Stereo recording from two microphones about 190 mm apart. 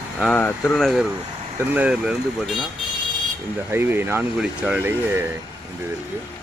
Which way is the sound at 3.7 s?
10° right (ahead or behind).